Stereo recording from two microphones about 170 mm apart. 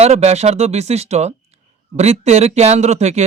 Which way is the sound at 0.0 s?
40° right (ahead or behind).